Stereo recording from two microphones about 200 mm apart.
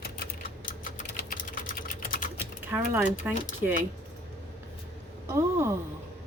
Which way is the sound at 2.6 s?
10° right (ahead or behind).